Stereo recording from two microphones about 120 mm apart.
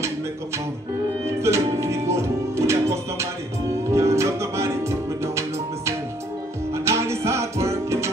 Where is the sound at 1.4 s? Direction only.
25° right (ahead or behind).